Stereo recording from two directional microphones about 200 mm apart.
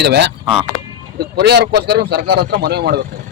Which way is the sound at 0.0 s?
55° right (ahead or behind).